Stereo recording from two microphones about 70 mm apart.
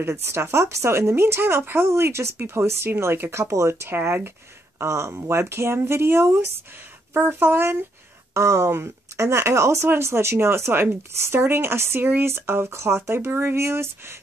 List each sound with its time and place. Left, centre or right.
0.0 s speech: right
4.7 s speech: right
8.4 s speech: right